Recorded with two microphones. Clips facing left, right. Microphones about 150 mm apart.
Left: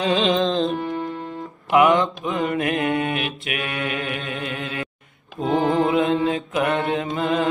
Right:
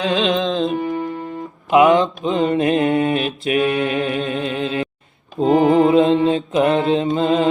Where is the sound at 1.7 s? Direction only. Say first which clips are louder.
Right 4 dB; 20° right (ahead or behind).